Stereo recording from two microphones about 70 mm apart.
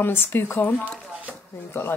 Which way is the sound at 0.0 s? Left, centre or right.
Left.